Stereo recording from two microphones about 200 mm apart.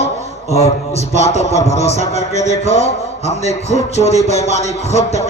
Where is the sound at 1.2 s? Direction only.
35° left (ahead or behind).